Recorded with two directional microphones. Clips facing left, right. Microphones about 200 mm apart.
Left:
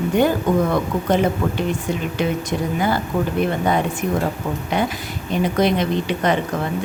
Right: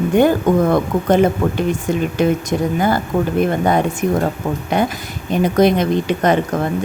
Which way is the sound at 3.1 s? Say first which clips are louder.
Right 3 dB; 50° right (ahead or behind).